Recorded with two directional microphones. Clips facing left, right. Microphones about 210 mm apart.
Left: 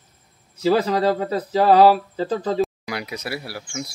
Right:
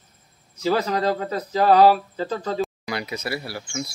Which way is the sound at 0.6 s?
30° left (ahead or behind).